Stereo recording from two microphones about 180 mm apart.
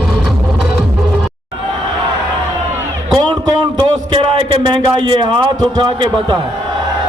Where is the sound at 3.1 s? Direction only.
25° right (ahead or behind).